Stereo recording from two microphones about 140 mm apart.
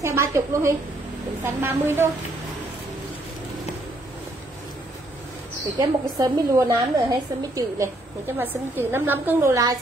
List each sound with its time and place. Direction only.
0.0 s a woman's voice: 20° right (ahead or behind)
5.8 s a woman's voice: 25° right (ahead or behind)